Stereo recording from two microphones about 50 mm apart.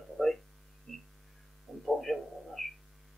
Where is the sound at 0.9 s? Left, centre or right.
Centre.